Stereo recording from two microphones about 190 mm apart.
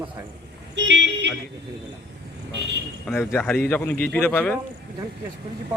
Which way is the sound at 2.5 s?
65° right (ahead or behind).